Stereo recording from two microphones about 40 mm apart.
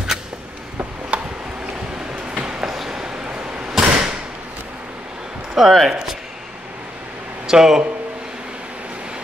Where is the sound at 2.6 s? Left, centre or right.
Centre; by 3.7 s right.